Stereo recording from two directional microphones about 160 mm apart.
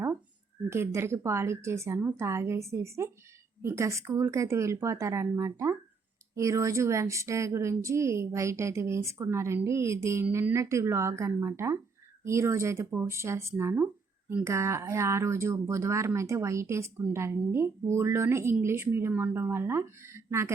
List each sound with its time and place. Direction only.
0.7 s speech: 15° right (ahead or behind)